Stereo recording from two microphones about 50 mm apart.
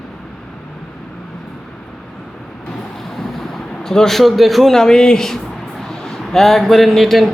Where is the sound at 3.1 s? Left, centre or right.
Centre.